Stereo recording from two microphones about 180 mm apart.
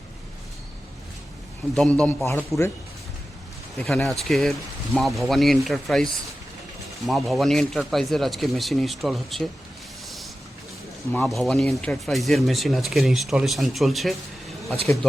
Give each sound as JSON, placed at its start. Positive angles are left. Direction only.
{"t": 1.7, "sound": "speech", "side_deg": 5}
{"t": 3.8, "sound": "speech", "side_deg": 0}
{"t": 11.1, "sound": "speech", "side_deg": 5}